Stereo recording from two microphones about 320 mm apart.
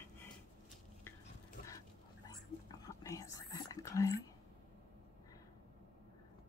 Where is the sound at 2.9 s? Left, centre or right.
Centre.